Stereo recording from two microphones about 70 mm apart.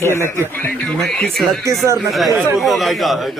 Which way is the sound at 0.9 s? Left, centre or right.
Centre.